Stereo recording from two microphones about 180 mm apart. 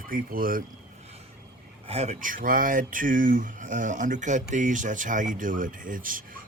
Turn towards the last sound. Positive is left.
turn(degrees=-50)  # may be behind; listen again after turning